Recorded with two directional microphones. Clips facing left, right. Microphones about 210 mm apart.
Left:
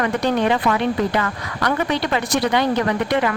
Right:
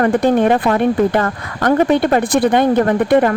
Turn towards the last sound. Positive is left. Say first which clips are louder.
# right 7 dB
turn(degrees=-50)  # may be behind; listen again after turning